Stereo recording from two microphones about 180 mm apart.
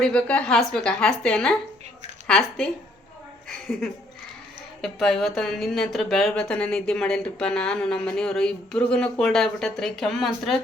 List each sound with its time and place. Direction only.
0.0 s speech: 5° left (ahead or behind)
4.8 s speech: centre (ahead or behind)